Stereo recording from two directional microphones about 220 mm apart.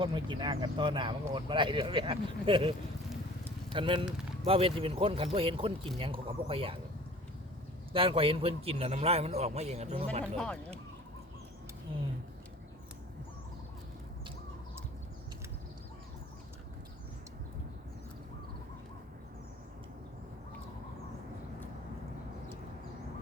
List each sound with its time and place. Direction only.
0.0 s speech: 20° right (ahead or behind)
7.9 s speech: 25° right (ahead or behind)
10.3 s speech: 5° left (ahead or behind)